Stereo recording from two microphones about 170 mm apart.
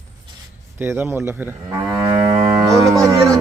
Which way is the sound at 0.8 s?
10° right (ahead or behind).